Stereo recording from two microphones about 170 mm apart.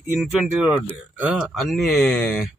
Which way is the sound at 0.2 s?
5° right (ahead or behind).